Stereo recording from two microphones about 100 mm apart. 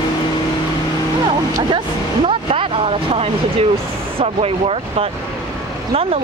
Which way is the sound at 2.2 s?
65° right (ahead or behind).